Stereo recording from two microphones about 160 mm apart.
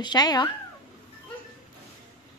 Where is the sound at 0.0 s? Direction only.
25° left (ahead or behind).